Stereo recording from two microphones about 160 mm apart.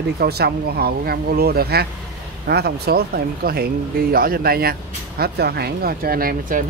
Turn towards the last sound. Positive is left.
turn(degrees=-60)  # may be behind; listen again after turning